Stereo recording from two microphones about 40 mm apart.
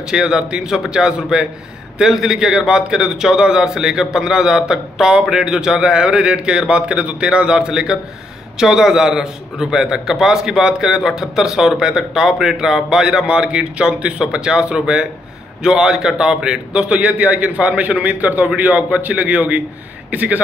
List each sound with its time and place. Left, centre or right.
0.1 s a man's voice: centre
2.0 s a man's voice: centre
16.9 s a man's voice: right